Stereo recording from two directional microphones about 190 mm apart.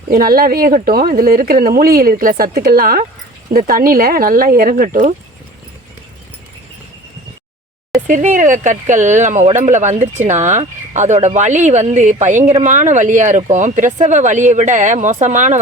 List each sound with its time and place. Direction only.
0.1 s speech: 50° right (ahead or behind)
8.0 s speech: 40° right (ahead or behind)